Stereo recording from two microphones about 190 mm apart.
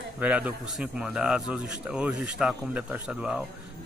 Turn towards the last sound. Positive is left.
turn(degrees=-5)  # may be behind; listen again after turning